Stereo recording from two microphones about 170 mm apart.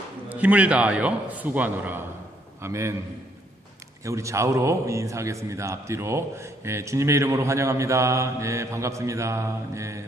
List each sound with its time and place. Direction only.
0.3 s a man's voice: 10° right (ahead or behind)
4.0 s a man's voice: 20° right (ahead or behind)